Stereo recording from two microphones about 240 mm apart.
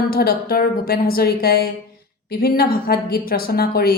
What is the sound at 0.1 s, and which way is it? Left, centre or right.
A woman's voice, left.